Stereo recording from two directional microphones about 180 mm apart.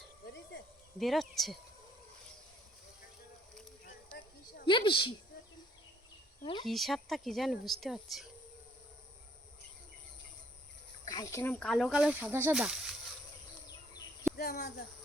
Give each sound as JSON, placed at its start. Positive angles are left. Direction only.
{"t": 0.9, "sound": "a woman's voice", "side_deg": 0}
{"t": 4.6, "sound": "a woman's voice", "side_deg": 30}
{"t": 6.4, "sound": "speech", "side_deg": 25}
{"t": 6.7, "sound": "a woman's voice", "side_deg": 0}
{"t": 11.0, "sound": "speech", "side_deg": 20}
{"t": 11.6, "sound": "a woman's voice", "side_deg": 0}
{"t": 14.3, "sound": "speech", "side_deg": 60}